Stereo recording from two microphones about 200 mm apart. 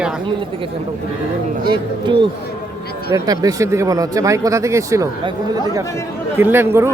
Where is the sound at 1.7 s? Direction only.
25° right (ahead or behind).